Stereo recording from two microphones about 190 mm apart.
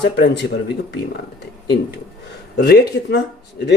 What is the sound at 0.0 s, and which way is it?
Speech, 65° left (ahead or behind).